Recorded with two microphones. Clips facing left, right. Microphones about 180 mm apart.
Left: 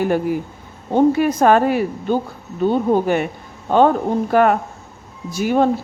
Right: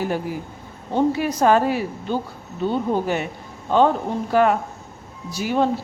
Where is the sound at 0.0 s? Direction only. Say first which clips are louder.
Left 6 dB; 55° left (ahead or behind).